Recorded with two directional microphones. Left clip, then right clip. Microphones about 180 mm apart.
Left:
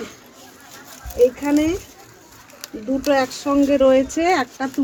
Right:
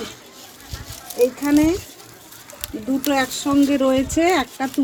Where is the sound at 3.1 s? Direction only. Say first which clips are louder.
Left 2 dB; 25° right (ahead or behind).